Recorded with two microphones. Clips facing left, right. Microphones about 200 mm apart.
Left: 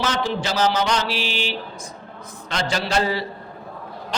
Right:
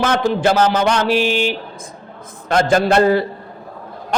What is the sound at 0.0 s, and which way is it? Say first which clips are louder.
A man's voice: right 8 dB; 55° right (ahead or behind).